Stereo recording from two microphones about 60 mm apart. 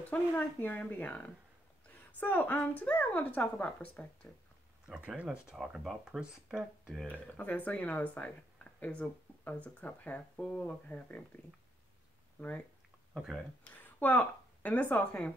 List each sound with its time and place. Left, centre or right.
0.0 s a woman's voice: left
5.0 s speech: right
7.1 s a woman's voice: left
12.4 s a woman's voice: left
13.2 s speech: centre
13.7 s a woman's voice: left